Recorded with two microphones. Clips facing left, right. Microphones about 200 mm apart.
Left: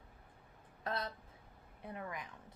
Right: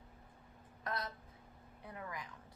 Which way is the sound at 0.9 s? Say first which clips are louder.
Left 2 dB; 30° left (ahead or behind).